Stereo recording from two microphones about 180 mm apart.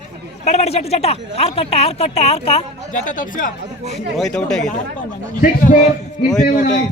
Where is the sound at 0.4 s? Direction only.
35° left (ahead or behind).